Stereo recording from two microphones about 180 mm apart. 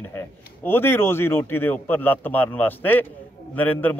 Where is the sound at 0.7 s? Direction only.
10° left (ahead or behind).